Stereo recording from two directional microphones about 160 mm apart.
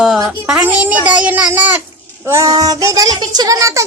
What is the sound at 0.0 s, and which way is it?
A child's voice, 5° right (ahead or behind).